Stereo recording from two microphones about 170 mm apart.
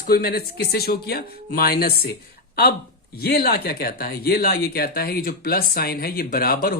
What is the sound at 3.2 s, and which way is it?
Speech, 65° left (ahead or behind).